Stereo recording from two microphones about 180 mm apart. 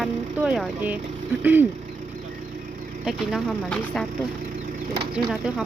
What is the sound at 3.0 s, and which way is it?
Speech, centre (ahead or behind).